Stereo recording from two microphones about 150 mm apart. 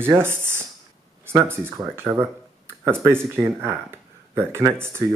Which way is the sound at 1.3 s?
15° right (ahead or behind).